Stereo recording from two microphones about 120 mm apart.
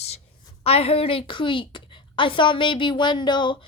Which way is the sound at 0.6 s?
55° left (ahead or behind).